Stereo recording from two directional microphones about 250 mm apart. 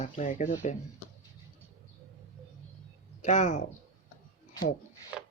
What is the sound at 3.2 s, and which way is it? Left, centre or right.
Speech, left.